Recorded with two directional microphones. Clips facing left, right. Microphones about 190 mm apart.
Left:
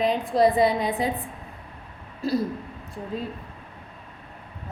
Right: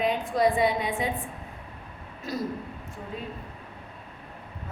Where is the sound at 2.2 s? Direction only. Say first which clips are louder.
Left 9 dB; 30° left (ahead or behind).